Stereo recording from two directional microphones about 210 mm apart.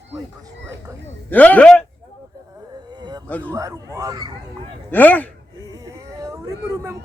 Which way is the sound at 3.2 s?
5° left (ahead or behind).